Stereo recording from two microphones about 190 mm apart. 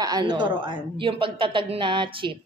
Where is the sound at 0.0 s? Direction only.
20° right (ahead or behind).